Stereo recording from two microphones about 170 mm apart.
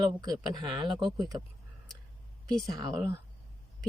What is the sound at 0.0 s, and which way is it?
Speech, 25° right (ahead or behind).